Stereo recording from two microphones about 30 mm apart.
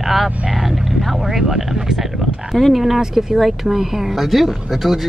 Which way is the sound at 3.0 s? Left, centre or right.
Centre.